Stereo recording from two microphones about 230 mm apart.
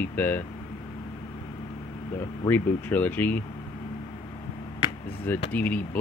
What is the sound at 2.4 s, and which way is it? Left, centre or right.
Speech, centre.